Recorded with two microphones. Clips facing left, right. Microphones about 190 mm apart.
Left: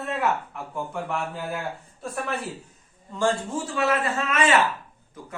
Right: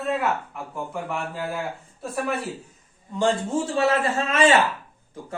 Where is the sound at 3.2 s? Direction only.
25° right (ahead or behind).